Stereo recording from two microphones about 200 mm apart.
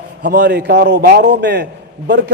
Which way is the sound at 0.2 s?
55° right (ahead or behind).